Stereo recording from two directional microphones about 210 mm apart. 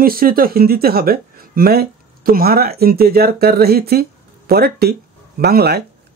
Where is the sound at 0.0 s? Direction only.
45° right (ahead or behind).